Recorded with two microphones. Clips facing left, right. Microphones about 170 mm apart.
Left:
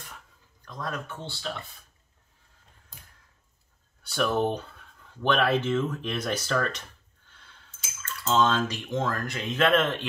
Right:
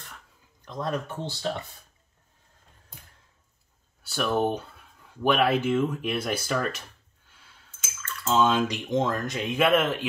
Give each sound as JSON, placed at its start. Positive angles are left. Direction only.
{"t": 0.7, "sound": "speech", "side_deg": -25}
{"t": 1.0, "sound": "speech", "side_deg": -35}
{"t": 4.0, "sound": "speech", "side_deg": -5}
{"t": 7.2, "sound": "a sound", "side_deg": -5}
{"t": 8.2, "sound": "speech", "side_deg": -5}